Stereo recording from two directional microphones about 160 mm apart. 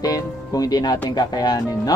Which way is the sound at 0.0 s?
25° left (ahead or behind).